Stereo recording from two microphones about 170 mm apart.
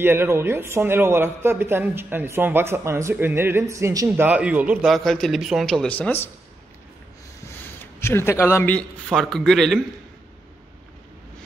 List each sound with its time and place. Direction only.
0.0 s a man's voice: 15° right (ahead or behind); by 6.3 s 10° left (ahead or behind)
7.8 s a man's voice: 15° left (ahead or behind)